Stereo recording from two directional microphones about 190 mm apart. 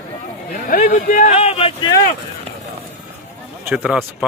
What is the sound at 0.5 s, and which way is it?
A man's voice, 45° left (ahead or behind).